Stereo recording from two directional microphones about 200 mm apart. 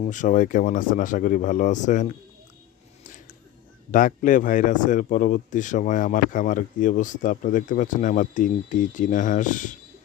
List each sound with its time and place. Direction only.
0.0 s speech: 40° left (ahead or behind)
3.9 s speech: 40° left (ahead or behind)